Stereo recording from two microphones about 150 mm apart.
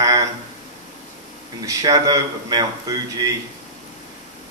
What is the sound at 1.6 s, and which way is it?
A man's voice, 25° right (ahead or behind).